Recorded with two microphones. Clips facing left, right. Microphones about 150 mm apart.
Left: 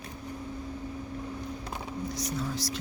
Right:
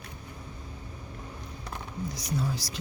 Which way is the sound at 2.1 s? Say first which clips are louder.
Right 2 dB; centre (ahead or behind).